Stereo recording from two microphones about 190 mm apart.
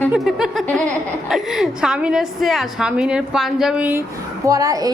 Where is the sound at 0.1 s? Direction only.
5° right (ahead or behind).